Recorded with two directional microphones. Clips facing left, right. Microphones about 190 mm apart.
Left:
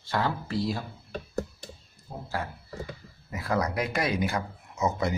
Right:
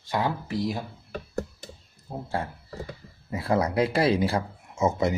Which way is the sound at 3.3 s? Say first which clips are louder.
Right 4 dB; 30° right (ahead or behind).